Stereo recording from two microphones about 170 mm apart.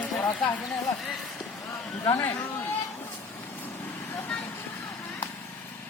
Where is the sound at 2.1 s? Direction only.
20° left (ahead or behind).